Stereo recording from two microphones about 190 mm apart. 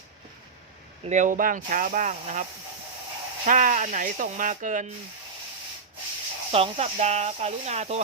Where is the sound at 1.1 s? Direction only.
40° right (ahead or behind).